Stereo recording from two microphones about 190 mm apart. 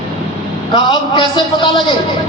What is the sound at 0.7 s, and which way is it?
A man's voice, 25° left (ahead or behind).